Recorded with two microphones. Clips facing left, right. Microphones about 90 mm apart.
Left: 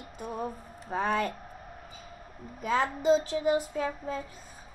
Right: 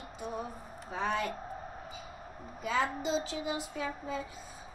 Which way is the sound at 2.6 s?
50° left (ahead or behind).